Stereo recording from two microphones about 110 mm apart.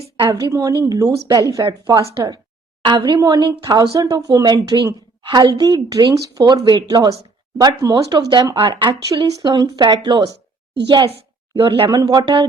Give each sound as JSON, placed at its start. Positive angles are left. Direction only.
{"t": 0.3, "sound": "a woman's voice", "side_deg": -35}
{"t": 11.5, "sound": "a woman's voice", "side_deg": -50}
{"t": 11.9, "sound": "speech", "side_deg": -35}